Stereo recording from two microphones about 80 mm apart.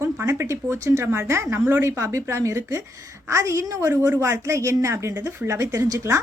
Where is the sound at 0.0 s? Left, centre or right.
Right.